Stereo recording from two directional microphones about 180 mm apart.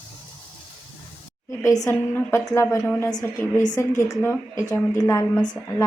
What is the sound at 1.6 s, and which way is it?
A woman's voice, 15° left (ahead or behind).